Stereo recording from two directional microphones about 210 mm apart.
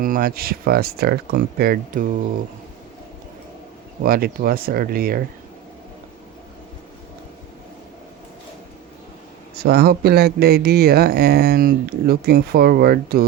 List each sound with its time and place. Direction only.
0.0 s speech: 45° right (ahead or behind)
4.0 s speech: 45° right (ahead or behind)
9.6 s speech: 50° right (ahead or behind)